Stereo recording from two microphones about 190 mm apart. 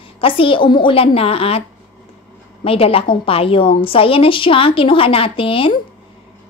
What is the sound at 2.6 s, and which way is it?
A woman's voice, 30° left (ahead or behind).